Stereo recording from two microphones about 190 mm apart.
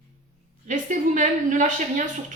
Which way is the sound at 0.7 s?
40° right (ahead or behind).